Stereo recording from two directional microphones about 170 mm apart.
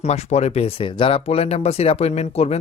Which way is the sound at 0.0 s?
40° left (ahead or behind).